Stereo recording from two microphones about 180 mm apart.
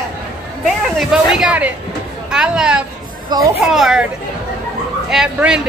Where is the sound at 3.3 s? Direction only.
20° right (ahead or behind).